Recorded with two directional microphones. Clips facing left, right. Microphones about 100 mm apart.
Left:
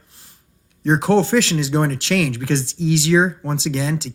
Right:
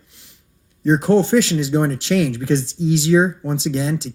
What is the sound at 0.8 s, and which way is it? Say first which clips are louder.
Speech: right 1 dB; 75° left (ahead or behind).